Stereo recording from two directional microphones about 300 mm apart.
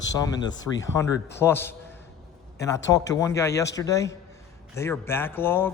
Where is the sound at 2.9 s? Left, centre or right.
Centre.